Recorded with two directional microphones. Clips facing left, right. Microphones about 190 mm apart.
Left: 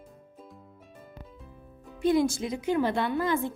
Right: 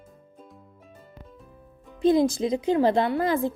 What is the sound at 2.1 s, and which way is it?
Speech, 30° right (ahead or behind).